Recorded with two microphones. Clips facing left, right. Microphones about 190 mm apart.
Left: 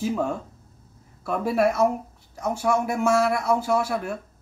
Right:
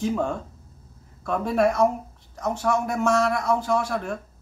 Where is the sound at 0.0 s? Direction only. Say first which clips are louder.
Even; 5° left (ahead or behind).